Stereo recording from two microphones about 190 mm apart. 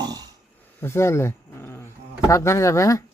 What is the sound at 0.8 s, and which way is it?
Dog, 15° left (ahead or behind).